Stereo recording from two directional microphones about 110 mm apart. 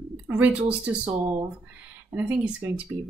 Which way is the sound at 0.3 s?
15° right (ahead or behind).